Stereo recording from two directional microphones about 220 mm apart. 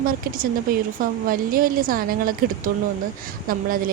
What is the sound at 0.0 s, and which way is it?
Speech, 40° right (ahead or behind).